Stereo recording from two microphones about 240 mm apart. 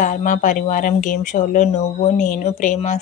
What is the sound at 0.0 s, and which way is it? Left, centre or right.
A woman's voice, left.